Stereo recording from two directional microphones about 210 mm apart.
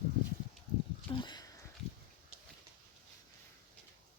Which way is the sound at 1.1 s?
20° left (ahead or behind).